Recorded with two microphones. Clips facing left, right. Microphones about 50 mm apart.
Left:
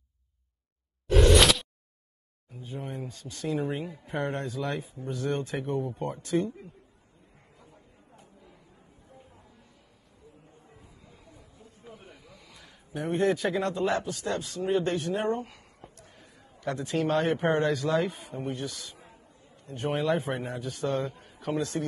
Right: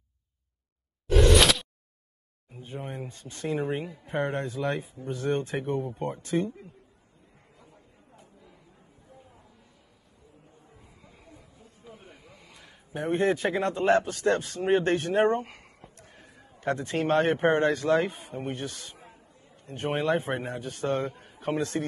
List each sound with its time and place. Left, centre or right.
1.0 s a sound: centre
2.5 s speech: right
11.1 s a sound: right
11.9 s snake: right
12.9 s a man's voice: right
18.4 s a man's voice: right